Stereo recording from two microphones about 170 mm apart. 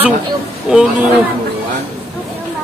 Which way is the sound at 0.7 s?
5° right (ahead or behind).